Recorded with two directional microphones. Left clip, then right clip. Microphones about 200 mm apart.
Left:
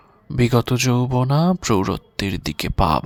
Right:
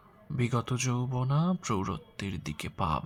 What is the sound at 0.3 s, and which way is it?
Speech, 45° left (ahead or behind).